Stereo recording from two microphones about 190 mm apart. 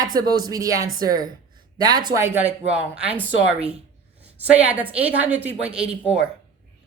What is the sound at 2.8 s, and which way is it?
Speech, 5° right (ahead or behind).